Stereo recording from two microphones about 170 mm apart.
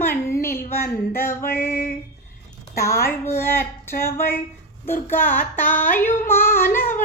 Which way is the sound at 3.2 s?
15° left (ahead or behind).